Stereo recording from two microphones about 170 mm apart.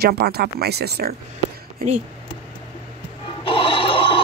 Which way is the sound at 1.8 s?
60° right (ahead or behind).